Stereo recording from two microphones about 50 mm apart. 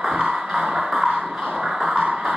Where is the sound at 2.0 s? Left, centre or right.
Right.